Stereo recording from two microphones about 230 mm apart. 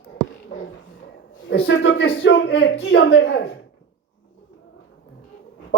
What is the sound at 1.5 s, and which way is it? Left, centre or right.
A man's voice, left.